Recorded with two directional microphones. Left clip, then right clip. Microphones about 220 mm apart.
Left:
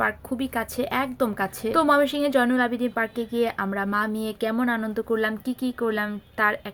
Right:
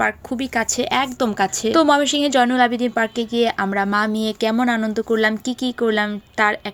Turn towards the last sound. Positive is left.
turn(degrees=-30)  # may be behind; listen again after turning